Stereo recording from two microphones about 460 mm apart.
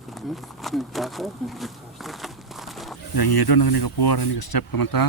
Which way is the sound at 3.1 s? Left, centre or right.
Left.